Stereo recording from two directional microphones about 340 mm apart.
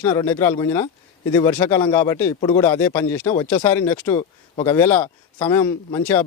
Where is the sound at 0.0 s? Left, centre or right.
Centre.